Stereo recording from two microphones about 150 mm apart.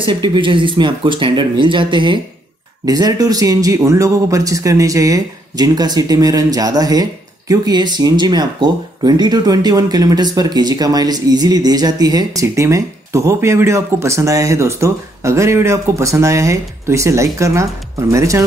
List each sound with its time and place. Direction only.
0.0 s speech: 35° right (ahead or behind)